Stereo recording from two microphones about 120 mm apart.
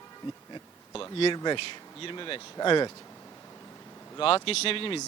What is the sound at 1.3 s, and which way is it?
Speech, 40° left (ahead or behind).